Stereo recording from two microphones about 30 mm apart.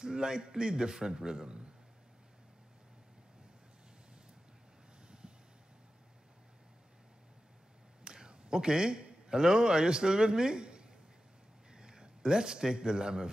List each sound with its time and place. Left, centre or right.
0.0 s a man's voice: right
5.0 s a sound: right
8.0 s a man's voice: right